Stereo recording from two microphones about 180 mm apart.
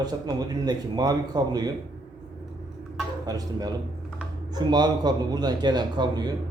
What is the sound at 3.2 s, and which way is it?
Speech, 20° right (ahead or behind).